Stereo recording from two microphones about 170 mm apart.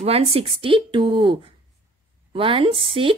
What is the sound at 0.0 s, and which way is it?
A woman's voice, 35° right (ahead or behind).